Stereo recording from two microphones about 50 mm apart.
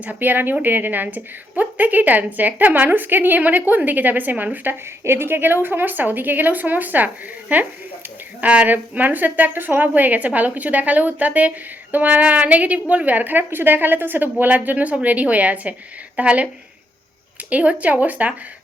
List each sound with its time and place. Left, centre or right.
0.0 s a woman's voice: right
17.5 s a woman's voice: right